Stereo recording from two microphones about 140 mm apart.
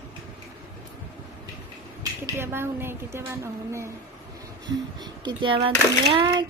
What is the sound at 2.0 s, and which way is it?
Speech, 20° right (ahead or behind).